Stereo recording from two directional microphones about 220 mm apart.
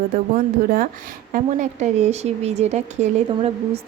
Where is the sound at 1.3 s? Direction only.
35° right (ahead or behind).